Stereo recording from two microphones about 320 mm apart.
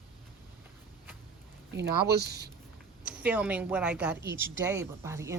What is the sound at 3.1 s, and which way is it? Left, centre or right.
A woman's voice, centre.